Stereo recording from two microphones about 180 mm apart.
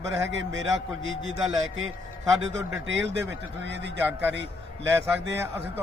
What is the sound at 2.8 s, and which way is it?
Speech, 85° right.